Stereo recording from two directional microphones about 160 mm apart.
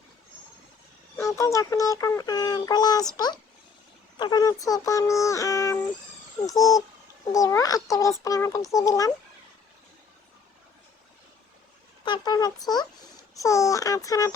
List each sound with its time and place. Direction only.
1.1 s speech: 20° left (ahead or behind)
4.2 s speech: 25° left (ahead or behind)
12.0 s speech: 25° left (ahead or behind)